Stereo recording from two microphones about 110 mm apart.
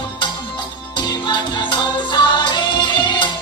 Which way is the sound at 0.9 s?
45° left (ahead or behind).